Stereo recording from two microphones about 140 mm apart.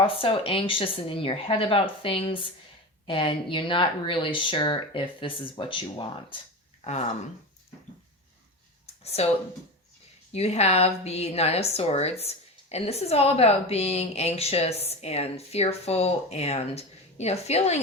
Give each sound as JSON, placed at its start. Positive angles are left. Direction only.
{"t": 0.0, "sound": "speech", "side_deg": 40}
{"t": 10.3, "sound": "a woman's voice", "side_deg": 50}